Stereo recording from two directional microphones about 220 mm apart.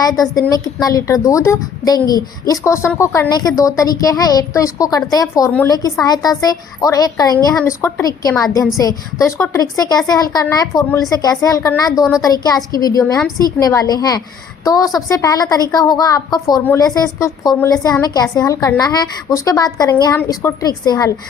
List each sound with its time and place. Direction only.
0.0 s a woman's voice: 15° left (ahead or behind)